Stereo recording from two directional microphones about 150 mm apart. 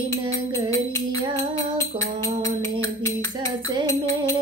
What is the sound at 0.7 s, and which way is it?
Music, 20° left (ahead or behind).